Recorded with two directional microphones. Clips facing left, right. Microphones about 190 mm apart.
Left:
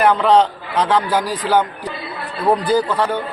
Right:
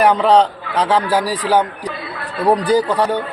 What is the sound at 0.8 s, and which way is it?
A man's voice, 10° right (ahead or behind).